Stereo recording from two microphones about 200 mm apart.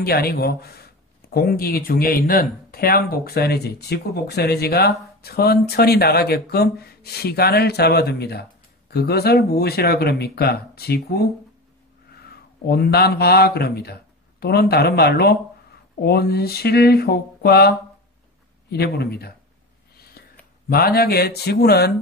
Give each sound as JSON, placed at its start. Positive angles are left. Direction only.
{"t": 0.0, "sound": "speech", "side_deg": 50}
{"t": 12.3, "sound": "speech", "side_deg": 50}
{"t": 20.2, "sound": "a sound", "side_deg": 50}
{"t": 20.7, "sound": "speech", "side_deg": 50}